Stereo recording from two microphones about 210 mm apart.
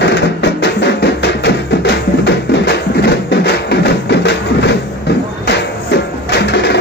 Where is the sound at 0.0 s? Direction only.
55° left (ahead or behind).